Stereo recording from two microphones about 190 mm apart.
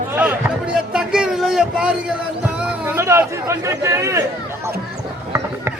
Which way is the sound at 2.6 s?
10° right (ahead or behind).